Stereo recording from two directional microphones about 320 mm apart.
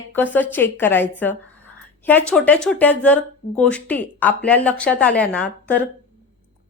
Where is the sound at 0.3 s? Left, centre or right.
Centre.